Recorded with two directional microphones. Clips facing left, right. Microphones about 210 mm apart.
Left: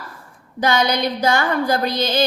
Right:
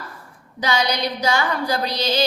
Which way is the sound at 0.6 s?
50° left (ahead or behind).